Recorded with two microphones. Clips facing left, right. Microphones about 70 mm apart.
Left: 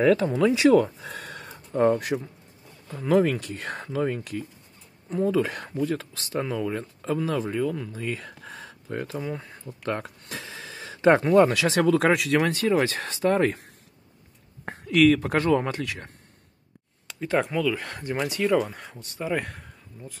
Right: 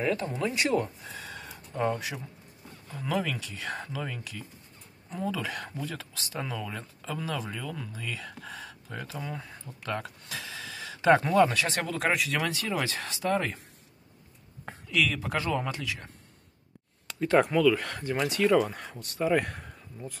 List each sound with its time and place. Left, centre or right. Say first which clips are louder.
0.0 s speech: left 9 dB; left
1.8 s speech: left 8 dB; left
6.4 s speech: left 8 dB; left
7.9 s speech: left 6 dB; left
9.2 s speech: left 5 dB; centre
9.8 s speech: left 4 dB; left
11.5 s speech: left 9 dB; left
12.4 s speech: left 8 dB; left
14.6 s speech: left 9 dB; left
17.1 s speech: right 2 dB; centre